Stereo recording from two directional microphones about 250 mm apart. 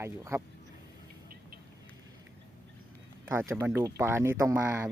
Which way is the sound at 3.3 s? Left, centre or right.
Centre.